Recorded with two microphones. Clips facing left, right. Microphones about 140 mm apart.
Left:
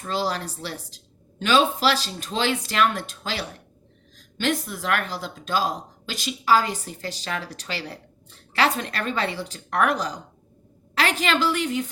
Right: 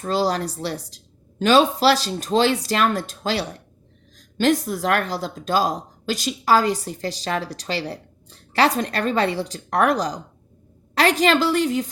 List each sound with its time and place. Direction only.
0.0 s a woman's voice: 40° right (ahead or behind)